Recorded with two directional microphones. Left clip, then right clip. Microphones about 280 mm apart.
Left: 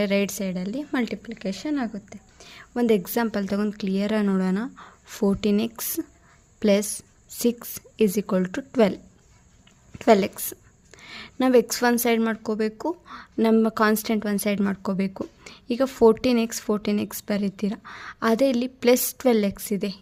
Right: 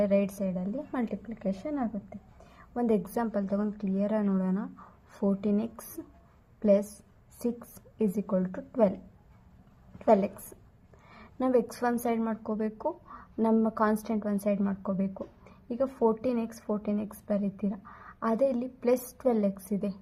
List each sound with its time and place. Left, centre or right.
0.0 s a woman's voice: left
10.1 s a woman's voice: left
10.9 s a sound: left
11.7 s a woman's voice: left
16.2 s a woman's voice: left
18.3 s a woman's voice: left